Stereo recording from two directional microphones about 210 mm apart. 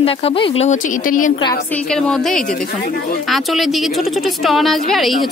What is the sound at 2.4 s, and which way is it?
Speech, 40° left (ahead or behind).